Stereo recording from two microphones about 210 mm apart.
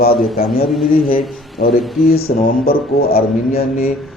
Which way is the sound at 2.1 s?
45° left (ahead or behind).